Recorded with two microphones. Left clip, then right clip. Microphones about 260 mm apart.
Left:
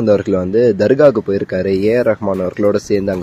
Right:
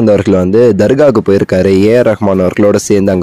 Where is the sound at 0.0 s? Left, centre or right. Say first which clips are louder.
Right 5 dB; right.